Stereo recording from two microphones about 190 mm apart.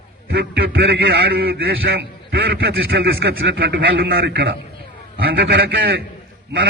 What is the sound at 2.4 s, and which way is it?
A man's voice, 75° right (ahead or behind).